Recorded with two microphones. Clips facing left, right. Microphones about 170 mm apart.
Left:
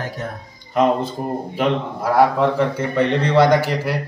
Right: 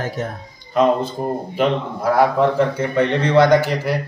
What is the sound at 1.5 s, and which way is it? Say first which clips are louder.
A man's voice: right 1 dB; centre (ahead or behind).